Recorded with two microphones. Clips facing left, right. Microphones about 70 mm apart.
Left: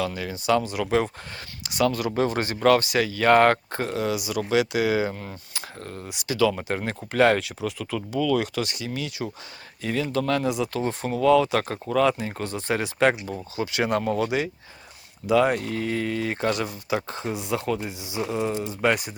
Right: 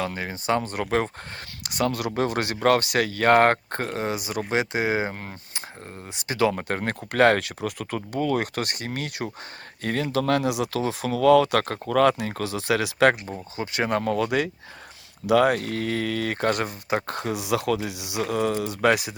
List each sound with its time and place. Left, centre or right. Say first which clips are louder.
0.0 s speech: left 1 dB; right
5.5 s speech: left 4 dB; right
13.6 s speech: left 1 dB; right